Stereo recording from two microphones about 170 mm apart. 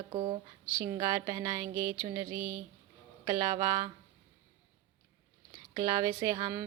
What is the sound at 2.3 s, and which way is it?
Speech, 65° right (ahead or behind).